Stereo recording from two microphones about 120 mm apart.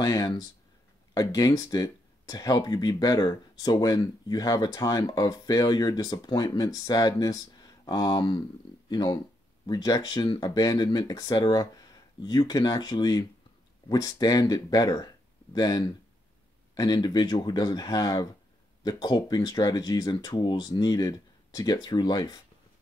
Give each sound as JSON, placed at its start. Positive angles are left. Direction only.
{"t": 0.0, "sound": "speech", "side_deg": 35}